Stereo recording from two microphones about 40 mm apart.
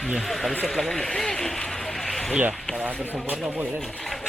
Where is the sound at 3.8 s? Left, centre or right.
Centre.